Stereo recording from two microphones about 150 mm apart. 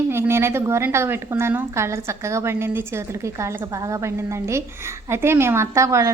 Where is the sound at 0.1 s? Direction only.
15° right (ahead or behind).